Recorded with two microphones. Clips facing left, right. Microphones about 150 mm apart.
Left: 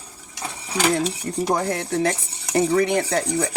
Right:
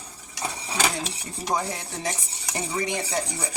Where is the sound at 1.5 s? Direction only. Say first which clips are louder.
Left 7 dB; 60° left (ahead or behind).